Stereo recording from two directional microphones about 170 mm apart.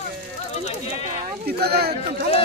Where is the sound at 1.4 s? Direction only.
70° right (ahead or behind).